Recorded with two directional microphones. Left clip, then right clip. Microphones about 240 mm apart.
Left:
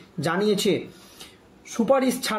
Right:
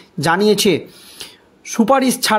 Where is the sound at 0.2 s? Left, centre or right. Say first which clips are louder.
Right 9 dB; right.